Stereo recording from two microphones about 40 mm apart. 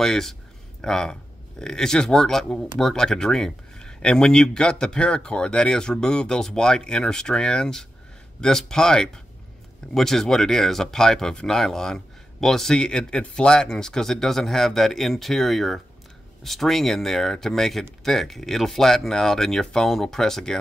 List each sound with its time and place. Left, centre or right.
0.0 s speech: centre